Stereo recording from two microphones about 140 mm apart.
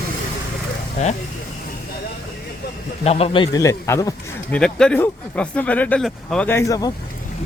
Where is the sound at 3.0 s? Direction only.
45° left (ahead or behind).